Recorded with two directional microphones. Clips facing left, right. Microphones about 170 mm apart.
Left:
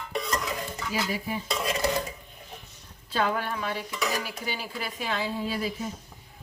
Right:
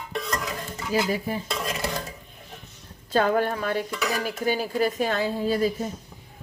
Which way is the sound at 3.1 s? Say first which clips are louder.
Right 6 dB; 45° right (ahead or behind).